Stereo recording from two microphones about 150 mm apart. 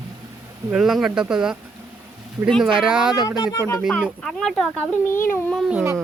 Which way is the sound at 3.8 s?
5° left (ahead or behind).